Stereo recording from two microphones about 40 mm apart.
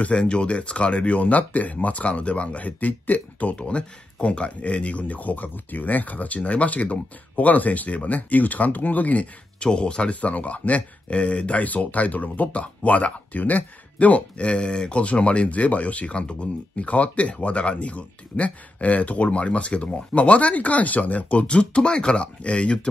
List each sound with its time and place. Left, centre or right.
0.0 s speech: left
3.5 s speech: left
9.6 s speech: left
14.4 s speech: left